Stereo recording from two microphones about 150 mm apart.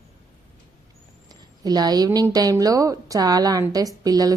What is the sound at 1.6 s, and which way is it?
A woman's voice, 25° right (ahead or behind).